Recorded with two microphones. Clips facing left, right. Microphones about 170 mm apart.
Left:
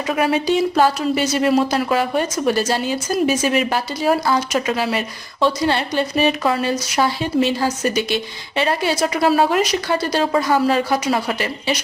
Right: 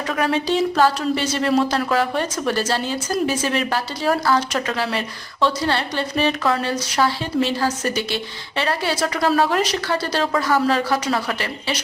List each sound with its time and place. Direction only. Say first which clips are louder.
0.1 s speech: left 3 dB; 10° left (ahead or behind)